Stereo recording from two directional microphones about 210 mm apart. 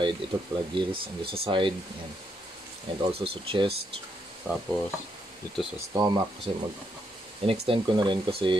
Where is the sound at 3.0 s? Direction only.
25° right (ahead or behind).